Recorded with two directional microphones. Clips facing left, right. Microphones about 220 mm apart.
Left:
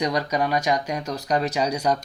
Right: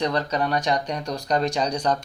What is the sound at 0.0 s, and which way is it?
Speech, 10° left (ahead or behind).